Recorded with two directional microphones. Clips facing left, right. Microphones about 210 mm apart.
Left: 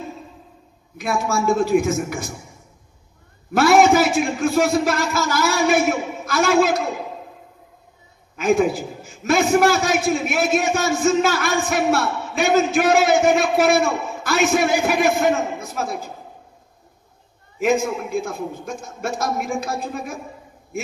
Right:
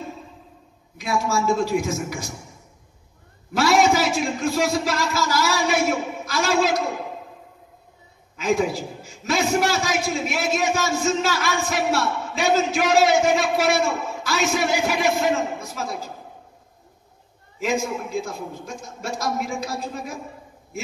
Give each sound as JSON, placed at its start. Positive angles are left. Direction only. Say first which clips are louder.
{"t": 0.9, "sound": "a man's voice", "louder": "left 1 dB", "side_deg": 55}
{"t": 3.5, "sound": "a man's voice", "louder": "left 4 dB", "side_deg": 55}
{"t": 8.4, "sound": "a man's voice", "louder": "left 4 dB", "side_deg": 55}
{"t": 17.6, "sound": "a man's voice", "louder": "left 5 dB", "side_deg": 60}